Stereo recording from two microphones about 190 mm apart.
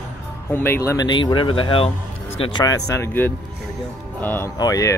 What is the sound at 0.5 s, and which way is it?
Speech, 10° left (ahead or behind).